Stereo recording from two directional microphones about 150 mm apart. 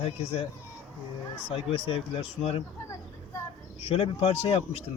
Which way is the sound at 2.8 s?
20° left (ahead or behind).